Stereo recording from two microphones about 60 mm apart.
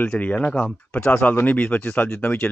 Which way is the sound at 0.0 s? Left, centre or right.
Left.